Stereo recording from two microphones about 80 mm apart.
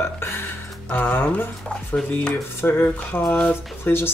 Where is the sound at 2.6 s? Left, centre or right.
Left.